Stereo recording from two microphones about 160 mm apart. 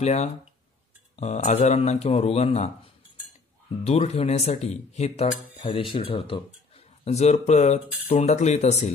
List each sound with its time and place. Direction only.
0.0 s a man's voice: 45° left (ahead or behind)